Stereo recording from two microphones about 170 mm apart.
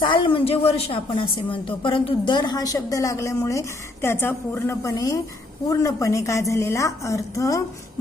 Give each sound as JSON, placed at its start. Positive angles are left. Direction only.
{"t": 0.0, "sound": "a woman's voice", "side_deg": 30}